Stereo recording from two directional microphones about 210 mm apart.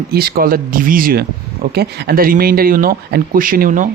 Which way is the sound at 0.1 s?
45° right (ahead or behind).